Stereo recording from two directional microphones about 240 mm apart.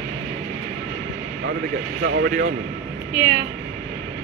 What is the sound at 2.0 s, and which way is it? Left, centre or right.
Speech, right.